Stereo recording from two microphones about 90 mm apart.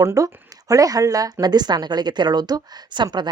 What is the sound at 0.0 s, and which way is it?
A woman's voice, 35° right (ahead or behind).